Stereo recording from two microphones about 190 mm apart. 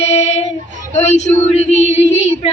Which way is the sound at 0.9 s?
35° left (ahead or behind).